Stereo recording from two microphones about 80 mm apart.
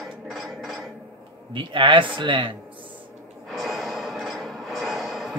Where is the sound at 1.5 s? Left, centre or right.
Right.